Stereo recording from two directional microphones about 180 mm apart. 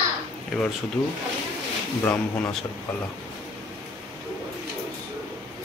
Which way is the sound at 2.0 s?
10° left (ahead or behind).